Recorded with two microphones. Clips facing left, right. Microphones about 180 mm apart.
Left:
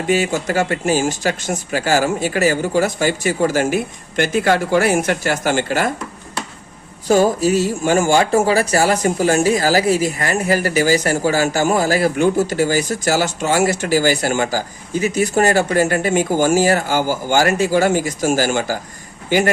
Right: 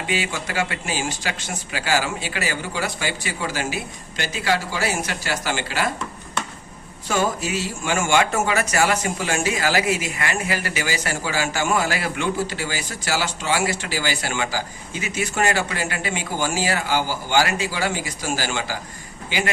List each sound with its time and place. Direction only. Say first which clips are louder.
0.1 s speech: left 10 dB; 45° left (ahead or behind)
7.1 s speech: left 9 dB; 40° left (ahead or behind)